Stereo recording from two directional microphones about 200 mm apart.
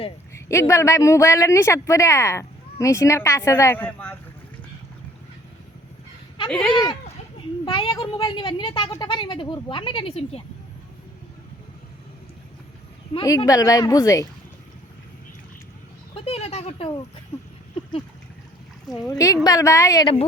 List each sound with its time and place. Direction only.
0.3 s speech: 15° left (ahead or behind)
7.6 s a woman's voice: 25° left (ahead or behind)
13.1 s speech: 15° left (ahead or behind)
16.1 s a woman's voice: 30° left (ahead or behind)
18.9 s speech: 15° left (ahead or behind)